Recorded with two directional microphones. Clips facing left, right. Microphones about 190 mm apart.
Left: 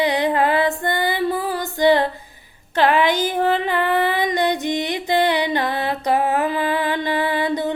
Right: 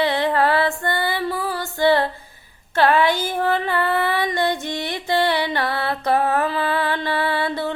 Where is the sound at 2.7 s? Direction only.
15° left (ahead or behind).